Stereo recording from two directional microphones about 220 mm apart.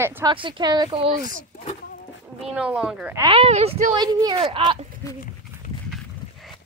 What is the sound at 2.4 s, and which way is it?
Speech, 5° right (ahead or behind).